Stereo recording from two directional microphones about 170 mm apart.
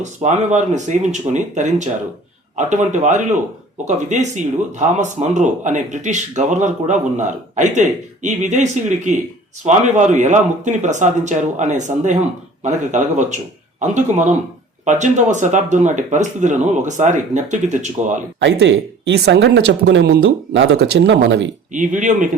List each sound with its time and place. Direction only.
0.0 s speech: 45° right (ahead or behind)
18.4 s speech: 90° right
21.7 s speech: 50° right (ahead or behind)